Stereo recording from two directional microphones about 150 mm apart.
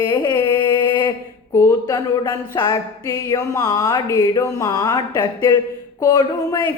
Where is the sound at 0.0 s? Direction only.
30° left (ahead or behind).